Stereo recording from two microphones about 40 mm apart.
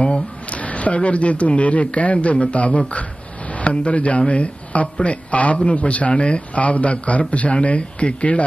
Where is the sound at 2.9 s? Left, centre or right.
Left.